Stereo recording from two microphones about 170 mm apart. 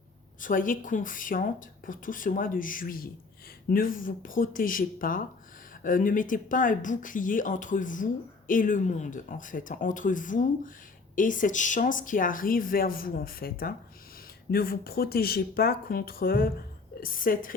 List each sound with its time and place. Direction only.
0.4 s speech: 50° left (ahead or behind)